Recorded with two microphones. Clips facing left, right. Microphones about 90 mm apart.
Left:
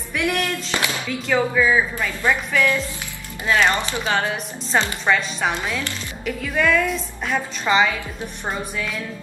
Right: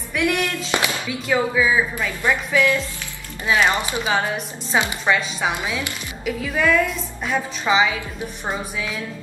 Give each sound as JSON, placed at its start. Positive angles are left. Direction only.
{"t": 0.1, "sound": "speech", "side_deg": 0}
{"t": 0.7, "sound": "music", "side_deg": -20}
{"t": 1.2, "sound": "a woman's voice", "side_deg": -5}